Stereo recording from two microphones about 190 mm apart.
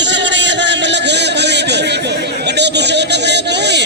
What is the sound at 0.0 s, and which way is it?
Music, 70° right (ahead or behind).